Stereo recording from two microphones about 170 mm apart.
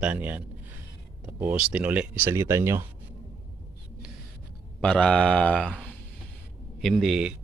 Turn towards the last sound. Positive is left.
turn(degrees=-5)  # may be behind; listen again after turning